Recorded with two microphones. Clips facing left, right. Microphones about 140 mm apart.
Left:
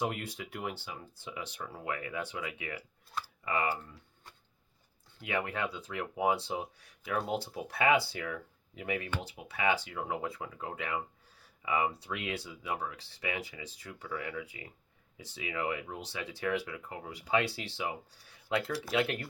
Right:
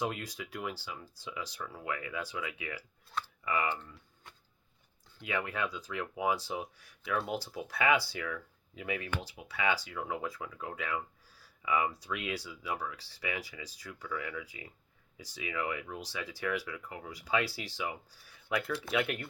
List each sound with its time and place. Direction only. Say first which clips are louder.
0.0 s speech: left 1 dB; 30° left (ahead or behind)
5.2 s speech: left 1 dB; 25° left (ahead or behind)